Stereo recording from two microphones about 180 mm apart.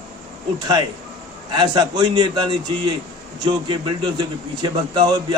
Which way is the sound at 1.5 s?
25° right (ahead or behind).